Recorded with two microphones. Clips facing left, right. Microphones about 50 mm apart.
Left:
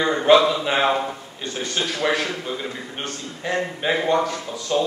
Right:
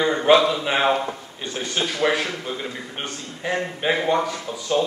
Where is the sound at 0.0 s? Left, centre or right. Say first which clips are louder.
Left 1 dB; centre.